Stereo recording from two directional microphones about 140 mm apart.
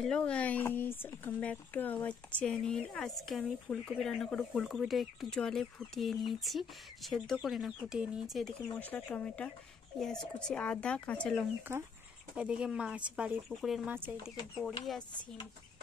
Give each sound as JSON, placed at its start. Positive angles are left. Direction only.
{"t": 0.0, "sound": "speech", "side_deg": 5}
{"t": 8.7, "sound": "speech", "side_deg": 10}
{"t": 11.7, "sound": "speech", "side_deg": -20}
{"t": 12.4, "sound": "speech", "side_deg": -5}